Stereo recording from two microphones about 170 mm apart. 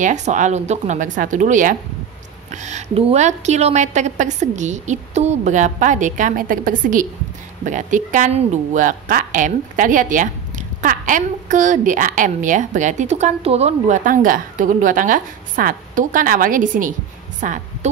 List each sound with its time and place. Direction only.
0.0 s a woman's voice: 45° right (ahead or behind)